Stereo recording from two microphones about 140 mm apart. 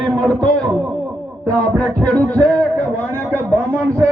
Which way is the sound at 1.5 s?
10° left (ahead or behind).